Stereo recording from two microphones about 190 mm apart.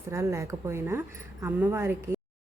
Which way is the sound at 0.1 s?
15° right (ahead or behind).